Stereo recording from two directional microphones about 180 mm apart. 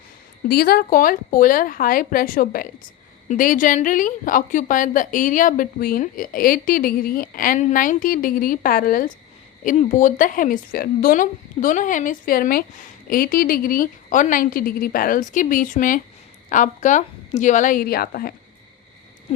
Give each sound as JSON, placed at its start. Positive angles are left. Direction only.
{"t": 0.4, "sound": "speech", "side_deg": 60}